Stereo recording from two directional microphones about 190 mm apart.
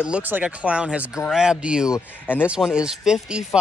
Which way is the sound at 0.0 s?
5° right (ahead or behind).